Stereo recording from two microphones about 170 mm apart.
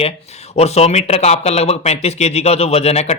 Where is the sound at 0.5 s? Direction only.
40° left (ahead or behind).